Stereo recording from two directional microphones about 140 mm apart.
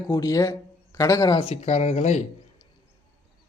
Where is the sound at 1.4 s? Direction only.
50° left (ahead or behind).